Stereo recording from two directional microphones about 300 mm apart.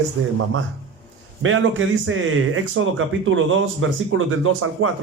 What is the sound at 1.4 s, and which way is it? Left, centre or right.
Speech, right.